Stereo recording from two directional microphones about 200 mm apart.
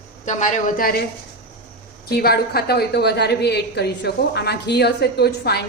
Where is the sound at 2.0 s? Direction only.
50° left (ahead or behind).